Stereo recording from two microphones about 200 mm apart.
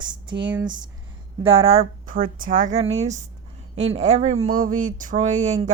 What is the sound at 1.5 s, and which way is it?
Speech, 30° right (ahead or behind).